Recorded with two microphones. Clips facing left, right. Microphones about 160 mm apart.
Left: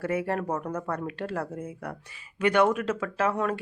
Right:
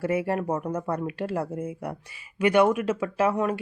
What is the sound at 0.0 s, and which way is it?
Speech, 10° right (ahead or behind).